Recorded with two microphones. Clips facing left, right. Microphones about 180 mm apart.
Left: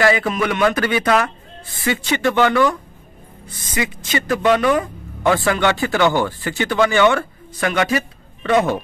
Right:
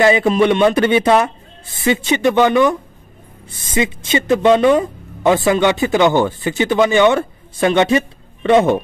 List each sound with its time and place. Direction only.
0.0 s speech: 20° right (ahead or behind)